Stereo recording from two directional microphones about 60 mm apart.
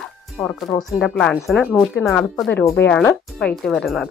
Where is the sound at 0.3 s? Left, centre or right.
Centre.